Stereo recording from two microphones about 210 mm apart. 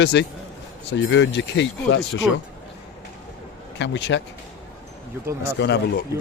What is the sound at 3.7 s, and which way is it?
Speech, 60° left (ahead or behind).